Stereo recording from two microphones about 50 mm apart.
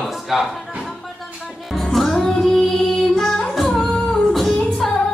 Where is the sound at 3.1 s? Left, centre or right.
Centre.